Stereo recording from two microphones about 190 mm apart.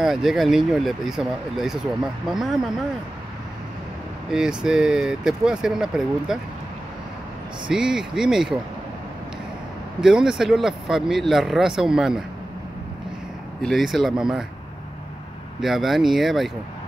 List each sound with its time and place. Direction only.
0.0 s speech: centre (ahead or behind)
4.3 s speech: 5° right (ahead or behind)
7.6 s speech: 5° right (ahead or behind)
9.9 s speech: 5° right (ahead or behind)
13.6 s speech: centre (ahead or behind)
15.6 s speech: centre (ahead or behind)